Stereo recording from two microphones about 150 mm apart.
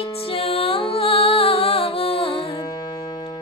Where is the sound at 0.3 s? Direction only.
40° left (ahead or behind).